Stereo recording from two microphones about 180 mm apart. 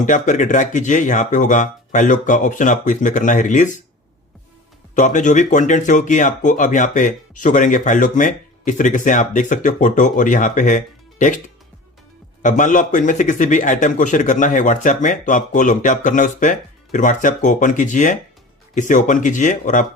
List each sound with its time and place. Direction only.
0.0 s speech: 45° left (ahead or behind)
4.9 s speech: 45° left (ahead or behind)